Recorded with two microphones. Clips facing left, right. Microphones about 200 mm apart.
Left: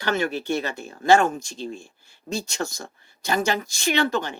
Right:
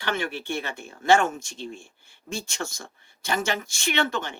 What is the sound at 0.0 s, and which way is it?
Speech, 40° left (ahead or behind).